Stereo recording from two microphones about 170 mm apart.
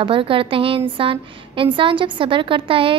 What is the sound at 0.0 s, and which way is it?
A woman's voice, 30° right (ahead or behind).